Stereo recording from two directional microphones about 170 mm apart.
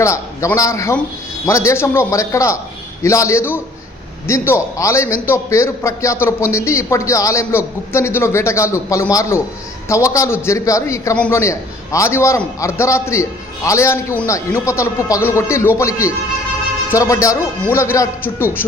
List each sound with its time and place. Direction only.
0.0 s a man's voice: 15° left (ahead or behind)